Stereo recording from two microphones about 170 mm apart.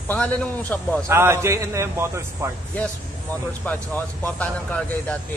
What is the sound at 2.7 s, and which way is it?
A man's voice, 10° left (ahead or behind).